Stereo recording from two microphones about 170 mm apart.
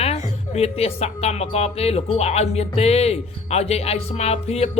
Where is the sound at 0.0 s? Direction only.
35° left (ahead or behind).